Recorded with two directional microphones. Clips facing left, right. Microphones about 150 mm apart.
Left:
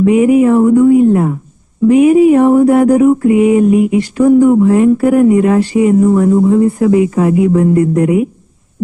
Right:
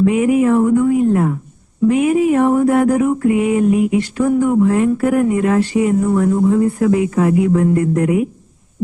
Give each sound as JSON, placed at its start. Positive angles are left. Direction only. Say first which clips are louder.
{"t": 0.0, "sound": "mantra", "louder": "left 5 dB", "side_deg": 15}